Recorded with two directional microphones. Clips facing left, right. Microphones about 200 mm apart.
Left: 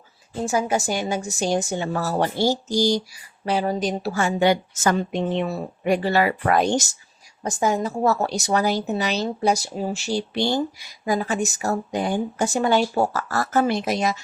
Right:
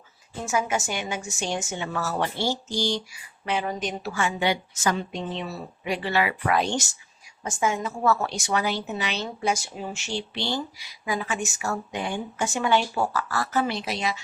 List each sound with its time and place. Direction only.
0.4 s a woman's voice: 35° left (ahead or behind)